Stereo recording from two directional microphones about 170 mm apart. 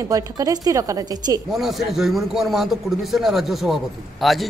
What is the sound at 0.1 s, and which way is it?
A woman's voice, 20° right (ahead or behind).